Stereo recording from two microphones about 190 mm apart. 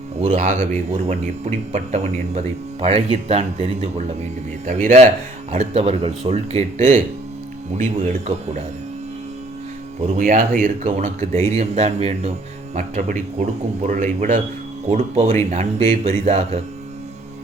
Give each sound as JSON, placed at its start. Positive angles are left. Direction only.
{"t": 0.2, "sound": "speech", "side_deg": -35}
{"t": 10.0, "sound": "speech", "side_deg": -40}